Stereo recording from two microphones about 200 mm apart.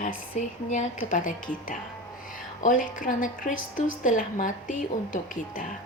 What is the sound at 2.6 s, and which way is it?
A woman's voice, 40° left (ahead or behind).